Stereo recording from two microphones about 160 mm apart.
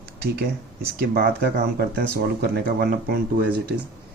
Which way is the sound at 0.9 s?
70° right (ahead or behind).